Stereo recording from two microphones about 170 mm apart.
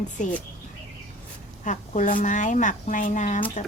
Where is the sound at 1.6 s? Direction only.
50° left (ahead or behind).